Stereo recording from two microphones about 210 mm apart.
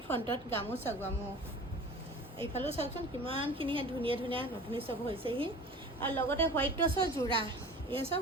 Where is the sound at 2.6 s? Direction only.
25° right (ahead or behind).